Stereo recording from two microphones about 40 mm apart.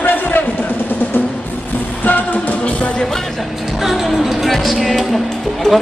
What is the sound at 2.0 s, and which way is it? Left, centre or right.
Music, left.